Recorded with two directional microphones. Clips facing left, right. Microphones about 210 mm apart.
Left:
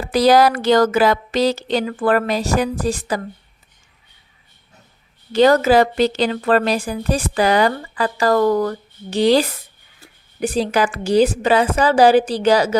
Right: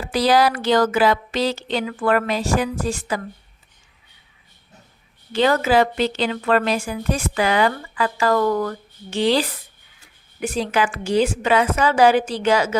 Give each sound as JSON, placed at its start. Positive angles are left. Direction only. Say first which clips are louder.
{"t": 0.1, "sound": "a woman's voice", "louder": "left 4 dB", "side_deg": 45}
{"t": 5.3, "sound": "a woman's voice", "louder": "left 5 dB", "side_deg": 40}